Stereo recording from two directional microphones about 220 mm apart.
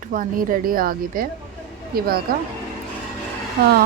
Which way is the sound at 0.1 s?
40° right (ahead or behind).